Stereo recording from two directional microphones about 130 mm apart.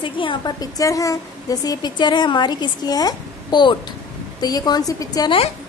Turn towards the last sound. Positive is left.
turn(degrees=30)  # may be behind; listen again after turning